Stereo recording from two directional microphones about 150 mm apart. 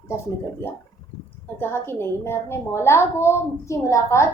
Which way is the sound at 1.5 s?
15° left (ahead or behind).